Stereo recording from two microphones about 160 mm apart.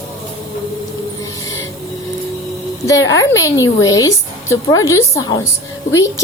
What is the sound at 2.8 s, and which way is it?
A woman's voice, 20° left (ahead or behind).